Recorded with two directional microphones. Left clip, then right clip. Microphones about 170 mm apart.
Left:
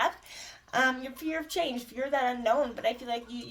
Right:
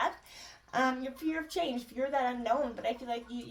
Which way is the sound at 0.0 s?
40° left (ahead or behind).